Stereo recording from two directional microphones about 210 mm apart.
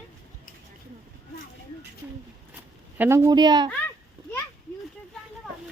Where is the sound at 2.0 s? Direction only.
10° right (ahead or behind).